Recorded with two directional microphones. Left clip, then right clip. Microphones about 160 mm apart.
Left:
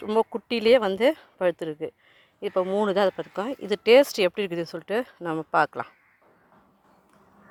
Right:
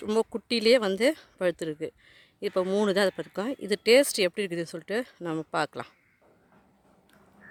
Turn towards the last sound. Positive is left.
turn(degrees=-15)  # may be behind; listen again after turning